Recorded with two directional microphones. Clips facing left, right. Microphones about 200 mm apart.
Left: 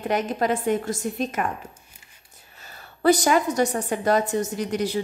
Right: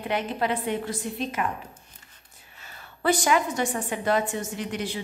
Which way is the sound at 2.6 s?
40° left (ahead or behind).